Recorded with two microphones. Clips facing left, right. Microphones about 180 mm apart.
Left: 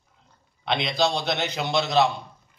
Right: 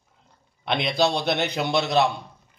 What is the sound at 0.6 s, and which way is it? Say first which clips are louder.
A man's voice: right 1 dB; 55° right (ahead or behind).